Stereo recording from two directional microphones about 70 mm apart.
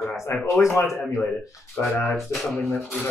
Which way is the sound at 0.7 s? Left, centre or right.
Left.